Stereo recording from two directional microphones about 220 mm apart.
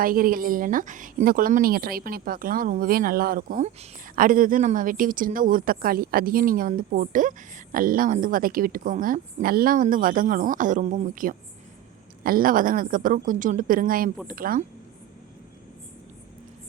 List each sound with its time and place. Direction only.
0.0 s speech: 40° right (ahead or behind)